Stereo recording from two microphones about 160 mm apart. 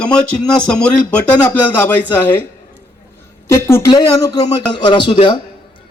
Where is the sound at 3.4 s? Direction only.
15° left (ahead or behind).